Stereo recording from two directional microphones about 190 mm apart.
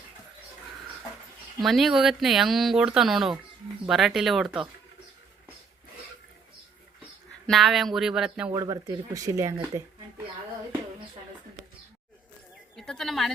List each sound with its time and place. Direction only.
1.6 s speech: centre (ahead or behind)
7.4 s speech: centre (ahead or behind)
8.5 s speech: 15° right (ahead or behind)
12.7 s speech: centre (ahead or behind)